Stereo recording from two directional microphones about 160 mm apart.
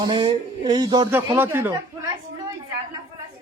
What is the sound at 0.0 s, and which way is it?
Speech, 30° right (ahead or behind).